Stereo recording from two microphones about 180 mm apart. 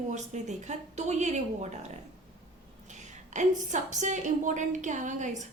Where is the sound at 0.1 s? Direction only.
40° right (ahead or behind).